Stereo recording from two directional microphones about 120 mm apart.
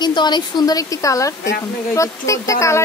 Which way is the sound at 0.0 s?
40° left (ahead or behind).